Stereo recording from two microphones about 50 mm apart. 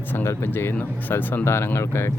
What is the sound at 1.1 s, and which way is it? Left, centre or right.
Speech, left.